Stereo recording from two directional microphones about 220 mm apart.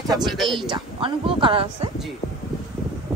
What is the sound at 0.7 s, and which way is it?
A woman's voice, 20° right (ahead or behind).